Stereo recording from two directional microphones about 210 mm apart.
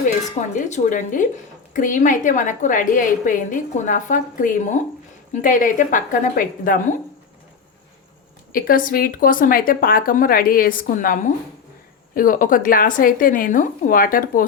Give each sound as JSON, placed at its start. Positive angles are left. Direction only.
{"t": 0.3, "sound": "a woman's voice", "side_deg": 35}
{"t": 8.5, "sound": "a woman's voice", "side_deg": 45}